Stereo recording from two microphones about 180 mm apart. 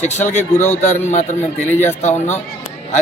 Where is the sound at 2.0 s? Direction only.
40° left (ahead or behind).